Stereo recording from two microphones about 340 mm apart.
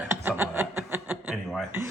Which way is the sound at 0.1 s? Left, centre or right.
Centre.